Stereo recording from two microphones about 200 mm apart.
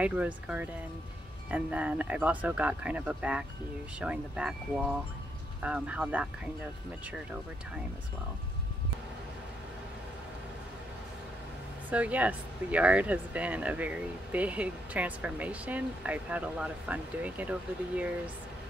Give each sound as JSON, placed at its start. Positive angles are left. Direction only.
{"t": 0.0, "sound": "speech", "side_deg": -5}
{"t": 11.9, "sound": "speech", "side_deg": -5}